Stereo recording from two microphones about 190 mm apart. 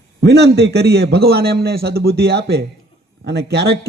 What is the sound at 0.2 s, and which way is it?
A man's voice, 60° right (ahead or behind).